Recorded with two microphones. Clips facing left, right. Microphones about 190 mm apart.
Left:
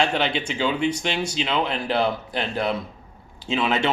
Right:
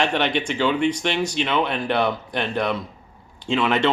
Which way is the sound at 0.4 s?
5° left (ahead or behind).